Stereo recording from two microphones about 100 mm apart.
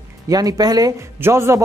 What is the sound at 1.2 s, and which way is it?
Speech, 30° right (ahead or behind).